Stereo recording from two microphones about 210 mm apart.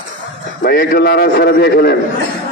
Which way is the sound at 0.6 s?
45° left (ahead or behind).